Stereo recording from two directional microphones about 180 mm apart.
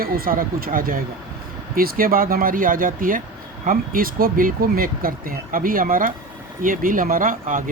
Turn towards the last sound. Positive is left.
turn(degrees=-50)  # may be behind; listen again after turning